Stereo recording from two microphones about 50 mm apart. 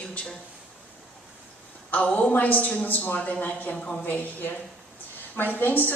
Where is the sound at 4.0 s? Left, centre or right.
Left.